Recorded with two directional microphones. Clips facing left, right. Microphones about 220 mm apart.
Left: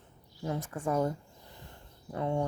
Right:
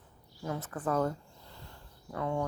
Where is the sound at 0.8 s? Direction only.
15° left (ahead or behind).